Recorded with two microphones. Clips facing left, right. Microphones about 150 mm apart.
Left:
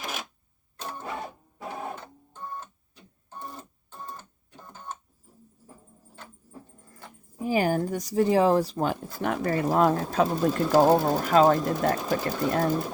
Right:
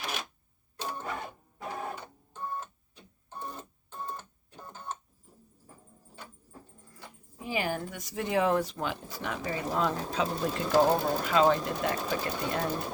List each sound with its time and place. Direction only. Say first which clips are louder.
7.3 s speech: left 8 dB; 40° left (ahead or behind)